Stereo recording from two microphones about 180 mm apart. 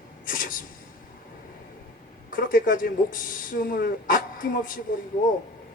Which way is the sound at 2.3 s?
50° left (ahead or behind).